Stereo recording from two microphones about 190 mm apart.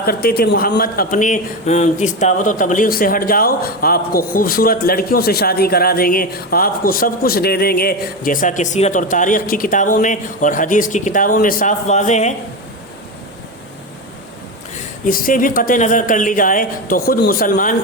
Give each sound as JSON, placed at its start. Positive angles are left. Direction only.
{"t": 0.0, "sound": "a man's voice", "side_deg": 55}
{"t": 15.0, "sound": "a man's voice", "side_deg": 45}